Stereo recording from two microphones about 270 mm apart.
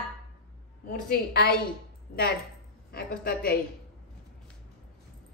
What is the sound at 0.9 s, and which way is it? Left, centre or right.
Speech, left.